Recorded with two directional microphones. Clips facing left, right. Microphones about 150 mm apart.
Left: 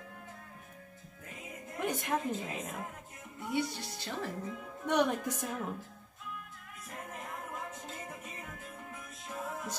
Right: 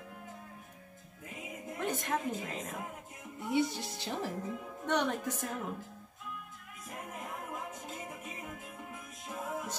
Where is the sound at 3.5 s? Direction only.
20° right (ahead or behind).